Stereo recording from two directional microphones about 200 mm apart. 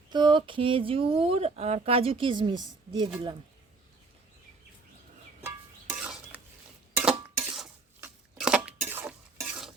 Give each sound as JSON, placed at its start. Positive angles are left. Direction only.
{"t": 0.1, "sound": "speech", "side_deg": -25}
{"t": 5.9, "sound": "a sound", "side_deg": -5}
{"t": 8.9, "sound": "stir", "side_deg": -10}